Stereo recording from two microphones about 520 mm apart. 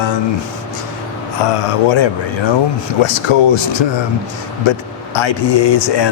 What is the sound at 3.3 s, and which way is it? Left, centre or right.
Speech, left.